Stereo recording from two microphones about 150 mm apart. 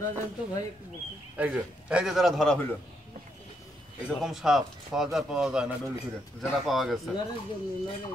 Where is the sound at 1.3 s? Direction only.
10° right (ahead or behind).